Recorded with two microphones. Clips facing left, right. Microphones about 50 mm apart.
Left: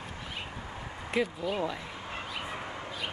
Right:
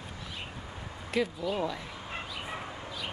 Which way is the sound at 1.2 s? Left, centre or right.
Centre.